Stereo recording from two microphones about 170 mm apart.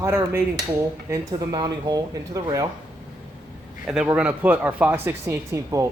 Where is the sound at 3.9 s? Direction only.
5° right (ahead or behind).